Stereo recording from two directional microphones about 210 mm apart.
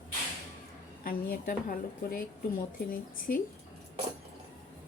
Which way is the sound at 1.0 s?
45° left (ahead or behind).